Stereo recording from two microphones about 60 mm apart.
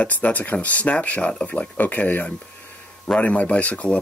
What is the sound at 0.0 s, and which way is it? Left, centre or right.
Speech, left.